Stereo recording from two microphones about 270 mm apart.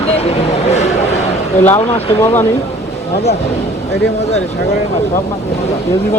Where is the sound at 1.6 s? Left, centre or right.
Centre.